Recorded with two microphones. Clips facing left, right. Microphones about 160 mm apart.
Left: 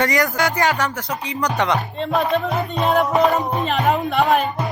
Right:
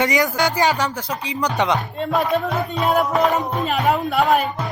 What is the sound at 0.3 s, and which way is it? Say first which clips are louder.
Speech: right 1 dB; 20° right (ahead or behind).